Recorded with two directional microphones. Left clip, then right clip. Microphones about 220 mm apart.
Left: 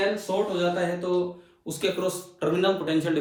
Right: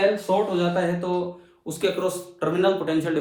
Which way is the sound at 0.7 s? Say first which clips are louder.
Right 2 dB; 25° right (ahead or behind).